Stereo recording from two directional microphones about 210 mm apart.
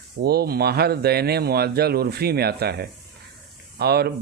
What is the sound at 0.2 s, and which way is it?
Speech, 50° right (ahead or behind).